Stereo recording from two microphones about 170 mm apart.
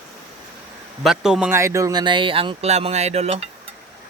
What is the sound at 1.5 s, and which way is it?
A man's voice, 15° right (ahead or behind).